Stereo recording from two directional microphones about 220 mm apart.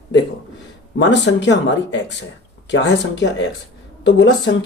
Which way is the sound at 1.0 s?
55° left (ahead or behind).